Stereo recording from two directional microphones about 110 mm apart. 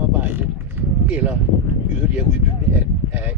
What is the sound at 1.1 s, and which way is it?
Speech, 15° right (ahead or behind).